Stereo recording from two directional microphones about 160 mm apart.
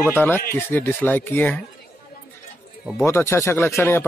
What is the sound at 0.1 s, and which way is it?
Speech, 10° left (ahead or behind).